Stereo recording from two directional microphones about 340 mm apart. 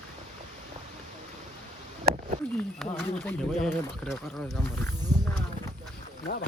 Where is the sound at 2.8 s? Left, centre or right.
Centre.